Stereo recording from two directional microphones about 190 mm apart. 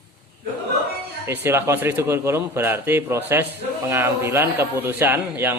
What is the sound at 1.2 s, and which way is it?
Speech, 10° right (ahead or behind).